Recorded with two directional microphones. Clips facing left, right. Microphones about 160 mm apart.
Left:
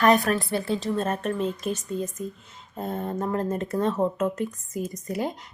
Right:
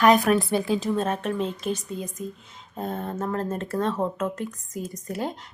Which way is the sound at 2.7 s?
10° left (ahead or behind).